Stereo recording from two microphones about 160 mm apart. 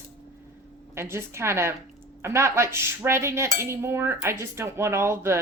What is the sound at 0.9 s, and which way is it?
Cutlery, 15° right (ahead or behind).